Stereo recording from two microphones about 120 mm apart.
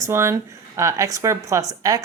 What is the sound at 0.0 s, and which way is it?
A woman's voice, 25° right (ahead or behind).